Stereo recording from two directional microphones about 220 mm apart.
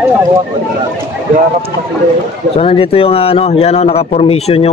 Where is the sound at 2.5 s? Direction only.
25° left (ahead or behind).